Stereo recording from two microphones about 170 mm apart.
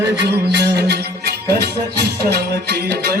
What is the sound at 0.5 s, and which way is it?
Music, 80° right.